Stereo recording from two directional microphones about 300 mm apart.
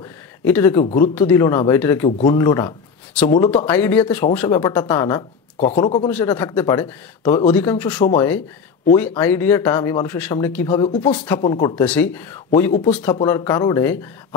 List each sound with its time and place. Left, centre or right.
0.5 s speech: centre
5.6 s speech: left
6.0 s speech: centre